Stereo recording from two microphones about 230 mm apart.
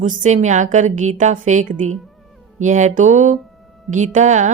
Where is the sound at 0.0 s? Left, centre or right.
Right.